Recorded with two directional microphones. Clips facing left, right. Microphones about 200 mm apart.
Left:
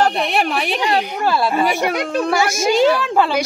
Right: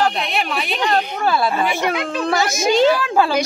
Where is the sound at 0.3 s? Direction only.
50° left (ahead or behind).